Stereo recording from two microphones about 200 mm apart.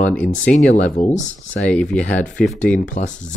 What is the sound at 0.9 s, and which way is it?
Speech, 35° left (ahead or behind).